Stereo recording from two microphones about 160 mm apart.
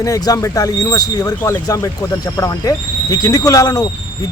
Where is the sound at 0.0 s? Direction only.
20° left (ahead or behind).